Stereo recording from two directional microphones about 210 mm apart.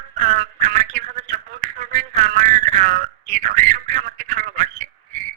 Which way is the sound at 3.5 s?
40° right (ahead or behind).